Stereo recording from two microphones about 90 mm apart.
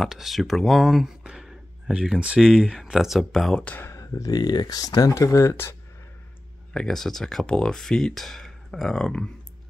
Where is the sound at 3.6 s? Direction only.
20° left (ahead or behind).